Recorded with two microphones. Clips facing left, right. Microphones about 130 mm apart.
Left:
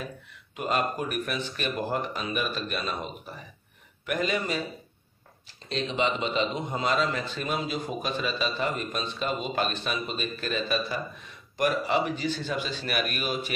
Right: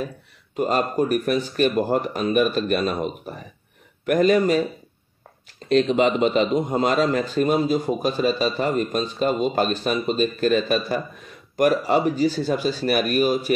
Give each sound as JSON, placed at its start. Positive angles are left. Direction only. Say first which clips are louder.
{"t": 0.6, "sound": "a man's voice", "louder": "right 7 dB", "side_deg": -40}
{"t": 5.7, "sound": "a man's voice", "louder": "right 10 dB", "side_deg": -50}